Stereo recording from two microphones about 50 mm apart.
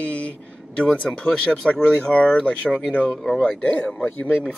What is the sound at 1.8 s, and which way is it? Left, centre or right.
Speech, left.